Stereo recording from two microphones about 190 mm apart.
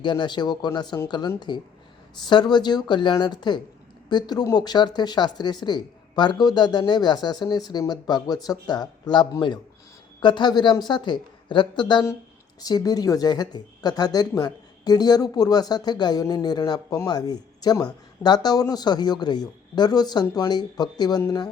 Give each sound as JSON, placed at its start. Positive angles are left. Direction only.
{"t": 0.0, "sound": "speech", "side_deg": 25}